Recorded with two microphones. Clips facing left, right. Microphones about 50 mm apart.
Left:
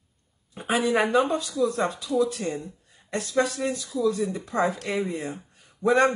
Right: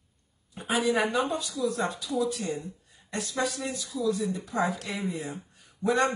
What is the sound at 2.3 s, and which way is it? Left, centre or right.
Speech, left.